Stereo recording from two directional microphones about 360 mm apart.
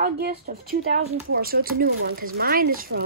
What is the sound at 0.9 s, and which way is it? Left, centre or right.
Speech, right.